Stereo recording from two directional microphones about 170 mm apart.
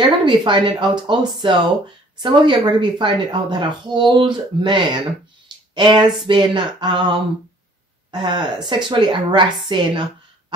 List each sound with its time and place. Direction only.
0.2 s a woman's voice: 25° right (ahead or behind)